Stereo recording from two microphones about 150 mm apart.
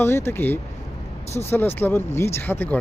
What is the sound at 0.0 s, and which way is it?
Speech, 15° left (ahead or behind).